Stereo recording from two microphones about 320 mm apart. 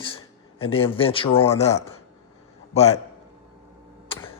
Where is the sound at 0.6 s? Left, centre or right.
Centre.